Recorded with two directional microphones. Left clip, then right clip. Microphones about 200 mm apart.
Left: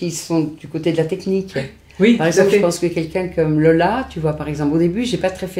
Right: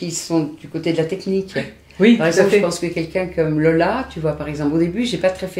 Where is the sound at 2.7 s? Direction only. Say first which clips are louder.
Left 3 dB; 30° left (ahead or behind).